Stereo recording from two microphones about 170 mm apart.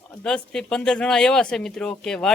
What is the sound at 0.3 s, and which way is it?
Speech, 5° left (ahead or behind).